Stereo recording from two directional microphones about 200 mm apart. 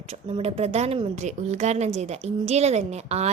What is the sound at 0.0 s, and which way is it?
Speech, 30° right (ahead or behind).